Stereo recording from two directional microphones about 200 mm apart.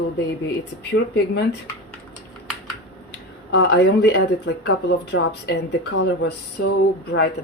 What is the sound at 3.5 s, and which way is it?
Speech, 55° left (ahead or behind).